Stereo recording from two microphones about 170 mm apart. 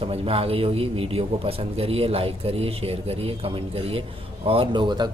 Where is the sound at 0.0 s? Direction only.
35° right (ahead or behind).